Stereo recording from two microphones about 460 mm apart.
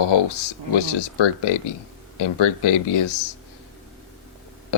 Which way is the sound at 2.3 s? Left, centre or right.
Left.